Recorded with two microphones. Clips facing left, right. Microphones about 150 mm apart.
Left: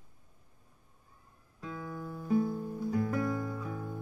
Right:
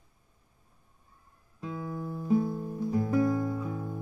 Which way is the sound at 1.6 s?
20° right (ahead or behind).